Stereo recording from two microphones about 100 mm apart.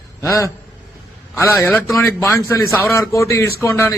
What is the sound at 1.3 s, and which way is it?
A man's voice, 25° left (ahead or behind).